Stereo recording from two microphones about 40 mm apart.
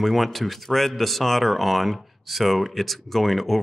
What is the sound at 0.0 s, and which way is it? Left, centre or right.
Speech, centre.